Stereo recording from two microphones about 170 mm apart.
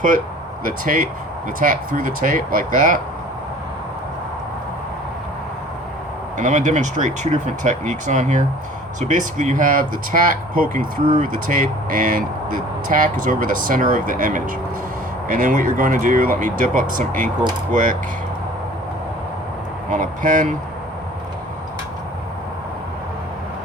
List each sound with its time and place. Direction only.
0.6 s speech: 55° right (ahead or behind)
6.3 s speech: 45° right (ahead or behind)
19.9 s speech: 50° right (ahead or behind)